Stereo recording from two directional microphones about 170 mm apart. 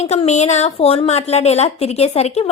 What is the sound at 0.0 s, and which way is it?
A woman's voice, 40° left (ahead or behind).